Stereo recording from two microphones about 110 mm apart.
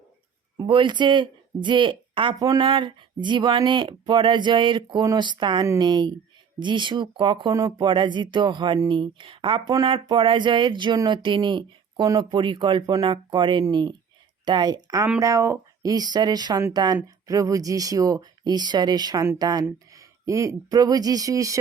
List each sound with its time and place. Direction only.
0.7 s speech: 45° right (ahead or behind); by 21.6 s 30° right (ahead or behind)